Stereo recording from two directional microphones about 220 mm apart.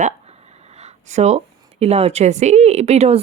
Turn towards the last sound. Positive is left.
turn(degrees=-30)  # may be behind; listen again after turning